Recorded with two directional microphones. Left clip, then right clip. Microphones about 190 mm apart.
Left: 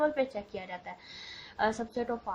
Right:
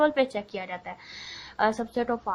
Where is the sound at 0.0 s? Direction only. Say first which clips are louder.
Right 6 dB; 30° right (ahead or behind).